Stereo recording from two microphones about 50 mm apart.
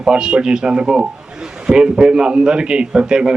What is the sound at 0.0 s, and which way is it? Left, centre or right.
A man's voice, centre.